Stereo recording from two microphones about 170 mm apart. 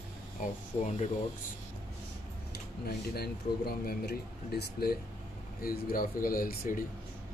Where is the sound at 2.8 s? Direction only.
65° left (ahead or behind).